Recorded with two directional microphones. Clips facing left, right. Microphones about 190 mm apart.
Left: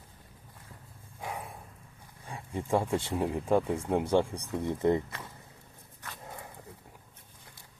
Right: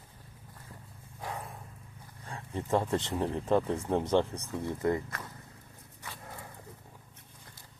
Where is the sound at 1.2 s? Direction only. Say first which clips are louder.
Left 1 dB; 10° left (ahead or behind).